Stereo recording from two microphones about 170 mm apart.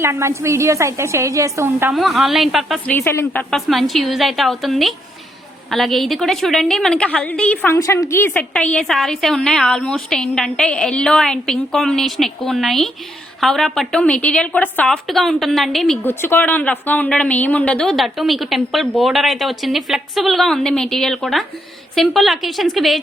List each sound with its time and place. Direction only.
0.0 s a woman's voice: 15° right (ahead or behind)
1.9 s a woman's voice: centre (ahead or behind)
3.5 s a woman's voice: centre (ahead or behind)
16.0 s a woman's voice: 15° left (ahead or behind)